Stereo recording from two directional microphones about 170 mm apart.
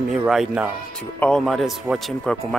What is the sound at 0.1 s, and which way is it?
Speech, centre (ahead or behind).